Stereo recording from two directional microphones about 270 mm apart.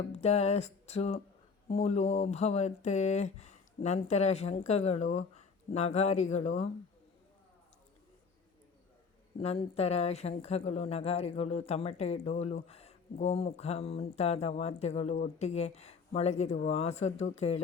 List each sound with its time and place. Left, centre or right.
0.1 s speech: left
9.4 s speech: left